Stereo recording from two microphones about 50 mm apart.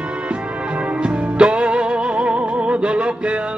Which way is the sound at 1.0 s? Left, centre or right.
Right.